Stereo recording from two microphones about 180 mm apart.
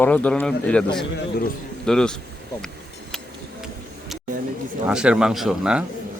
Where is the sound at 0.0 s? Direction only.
10° left (ahead or behind).